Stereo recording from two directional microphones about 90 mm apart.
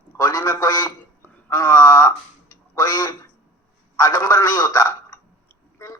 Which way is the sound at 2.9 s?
45° left (ahead or behind).